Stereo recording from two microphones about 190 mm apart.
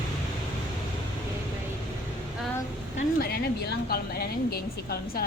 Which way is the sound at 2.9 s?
55° left (ahead or behind).